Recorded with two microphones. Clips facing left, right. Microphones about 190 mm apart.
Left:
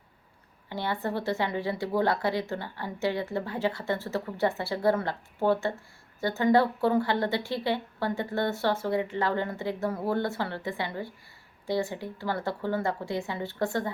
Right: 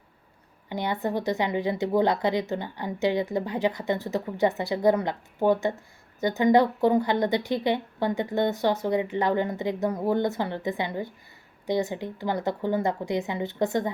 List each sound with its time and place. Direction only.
0.7 s speech: 15° right (ahead or behind)